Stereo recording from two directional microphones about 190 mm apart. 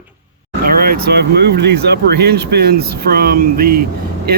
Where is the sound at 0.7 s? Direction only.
50° right (ahead or behind).